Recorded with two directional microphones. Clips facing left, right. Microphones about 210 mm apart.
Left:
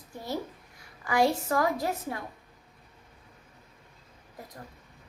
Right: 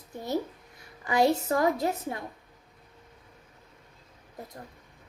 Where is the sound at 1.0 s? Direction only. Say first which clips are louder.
Right 2 dB; 20° right (ahead or behind).